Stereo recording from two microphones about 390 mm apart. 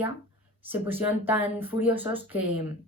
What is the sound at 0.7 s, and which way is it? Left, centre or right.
A woman's voice, centre.